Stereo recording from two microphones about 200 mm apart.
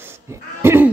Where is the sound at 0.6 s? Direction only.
10° right (ahead or behind).